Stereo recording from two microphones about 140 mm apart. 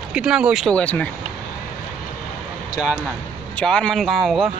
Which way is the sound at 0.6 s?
10° left (ahead or behind).